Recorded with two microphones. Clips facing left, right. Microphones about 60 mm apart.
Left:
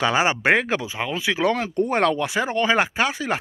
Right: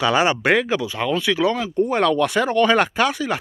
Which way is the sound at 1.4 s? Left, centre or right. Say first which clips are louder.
Right 1 dB; left.